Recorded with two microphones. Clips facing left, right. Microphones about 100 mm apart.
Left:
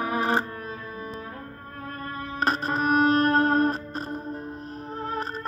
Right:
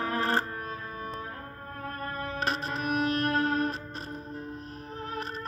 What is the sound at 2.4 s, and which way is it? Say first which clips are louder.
Music: left 8 dB; 45° left (ahead or behind).